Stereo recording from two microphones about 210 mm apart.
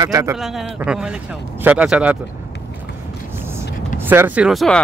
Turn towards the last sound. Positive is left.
turn(degrees=0)  # may be behind; listen again after turning